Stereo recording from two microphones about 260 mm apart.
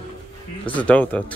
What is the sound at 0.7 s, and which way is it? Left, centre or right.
Speech, centre.